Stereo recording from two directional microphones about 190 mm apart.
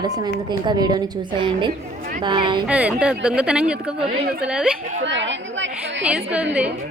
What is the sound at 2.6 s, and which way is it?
Speech, 5° right (ahead or behind).